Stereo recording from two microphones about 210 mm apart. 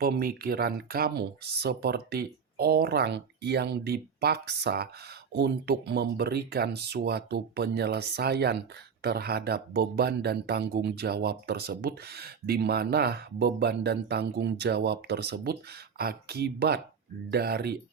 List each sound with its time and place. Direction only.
0.0 s speech: 45° right (ahead or behind)